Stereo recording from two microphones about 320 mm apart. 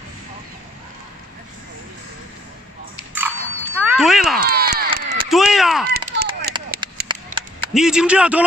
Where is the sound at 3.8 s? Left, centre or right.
Centre.